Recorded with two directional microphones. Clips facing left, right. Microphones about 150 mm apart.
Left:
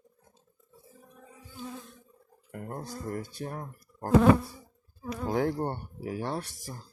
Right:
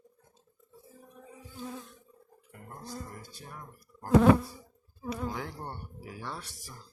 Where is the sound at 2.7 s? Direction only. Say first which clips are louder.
Left 6 dB; 60° left (ahead or behind).